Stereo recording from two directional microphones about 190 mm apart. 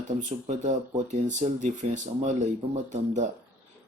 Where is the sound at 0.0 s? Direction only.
40° right (ahead or behind).